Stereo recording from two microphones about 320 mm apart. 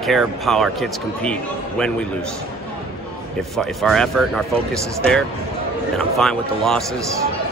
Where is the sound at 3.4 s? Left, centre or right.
Centre.